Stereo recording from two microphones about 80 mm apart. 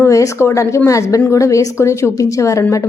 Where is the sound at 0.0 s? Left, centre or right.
Left.